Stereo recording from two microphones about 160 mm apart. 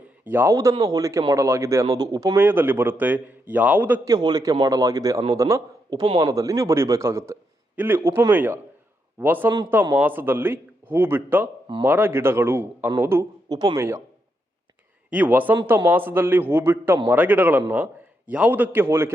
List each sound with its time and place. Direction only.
0.3 s speech: 15° right (ahead or behind)
4.1 s a man's voice: 25° right (ahead or behind)
15.1 s speech: 10° right (ahead or behind)